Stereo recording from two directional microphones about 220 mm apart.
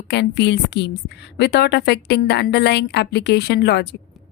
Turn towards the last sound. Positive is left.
turn(degrees=50)  # may be behind; listen again after turning